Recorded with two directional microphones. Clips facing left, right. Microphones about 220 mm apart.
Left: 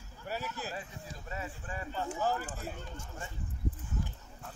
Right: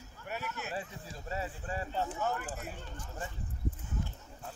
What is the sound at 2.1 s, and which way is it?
Speech, 35° left (ahead or behind).